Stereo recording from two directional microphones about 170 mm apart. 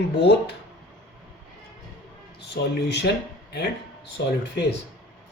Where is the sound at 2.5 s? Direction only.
80° left.